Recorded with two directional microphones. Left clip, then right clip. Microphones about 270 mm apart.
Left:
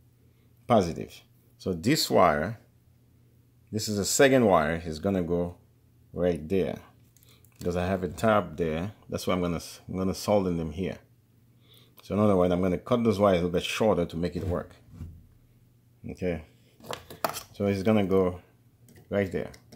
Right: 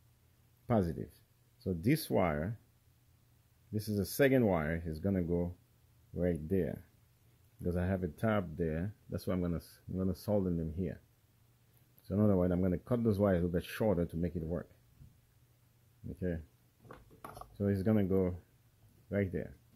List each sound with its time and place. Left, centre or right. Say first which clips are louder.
0.7 s speech: left 10 dB; right
3.7 s speech: left 9 dB; right
12.1 s speech: left 9 dB; right
17.6 s speech: left 8 dB; right